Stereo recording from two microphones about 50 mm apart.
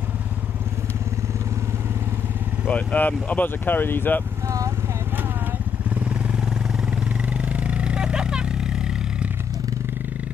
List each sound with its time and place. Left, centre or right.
2.7 s speech: left
5.9 s motorcycle: right
7.3 s vehicle: right